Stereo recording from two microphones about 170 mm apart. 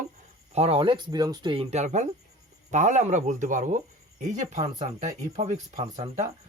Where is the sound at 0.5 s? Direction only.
35° right (ahead or behind).